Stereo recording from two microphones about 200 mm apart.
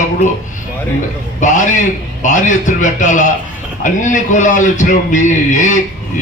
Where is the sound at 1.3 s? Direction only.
40° left (ahead or behind).